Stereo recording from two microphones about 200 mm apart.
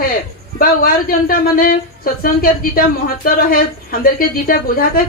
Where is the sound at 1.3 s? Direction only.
45° left (ahead or behind).